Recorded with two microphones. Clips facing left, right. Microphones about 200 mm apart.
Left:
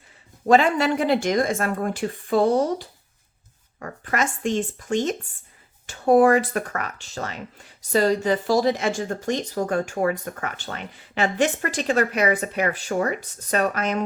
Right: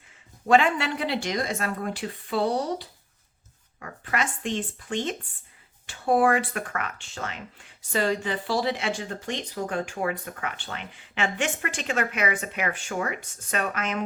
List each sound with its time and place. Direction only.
0.4 s speech: 40° left (ahead or behind)